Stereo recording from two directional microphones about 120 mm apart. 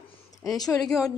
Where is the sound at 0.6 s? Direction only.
30° left (ahead or behind).